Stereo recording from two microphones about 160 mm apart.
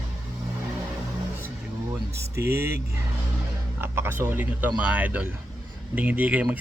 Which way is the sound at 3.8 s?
15° right (ahead or behind).